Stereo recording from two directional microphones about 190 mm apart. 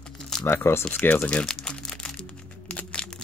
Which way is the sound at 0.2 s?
5° left (ahead or behind).